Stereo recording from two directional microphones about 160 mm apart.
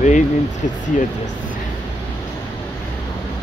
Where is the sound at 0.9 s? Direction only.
50° left (ahead or behind).